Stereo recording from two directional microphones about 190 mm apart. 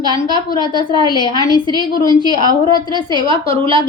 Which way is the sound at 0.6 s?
25° left (ahead or behind).